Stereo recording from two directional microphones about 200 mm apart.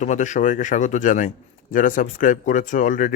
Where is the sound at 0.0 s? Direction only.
40° left (ahead or behind).